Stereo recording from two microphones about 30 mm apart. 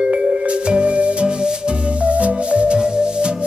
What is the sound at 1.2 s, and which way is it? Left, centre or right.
Music, right.